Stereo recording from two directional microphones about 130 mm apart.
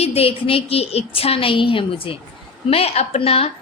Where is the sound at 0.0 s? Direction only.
50° left (ahead or behind).